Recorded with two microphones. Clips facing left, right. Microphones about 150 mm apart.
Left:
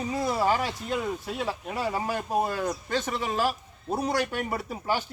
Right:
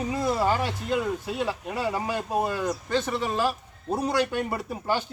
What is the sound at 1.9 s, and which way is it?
Speech, 10° left (ahead or behind).